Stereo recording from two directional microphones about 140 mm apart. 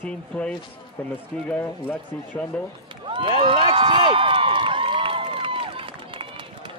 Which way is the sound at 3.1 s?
35° right (ahead or behind).